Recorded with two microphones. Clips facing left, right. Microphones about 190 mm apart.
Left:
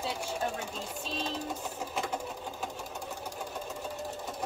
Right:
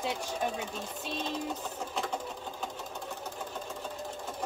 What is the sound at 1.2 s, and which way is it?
Sewing machine, 10° left (ahead or behind).